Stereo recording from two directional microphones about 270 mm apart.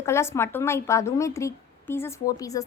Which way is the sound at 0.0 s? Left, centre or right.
Centre.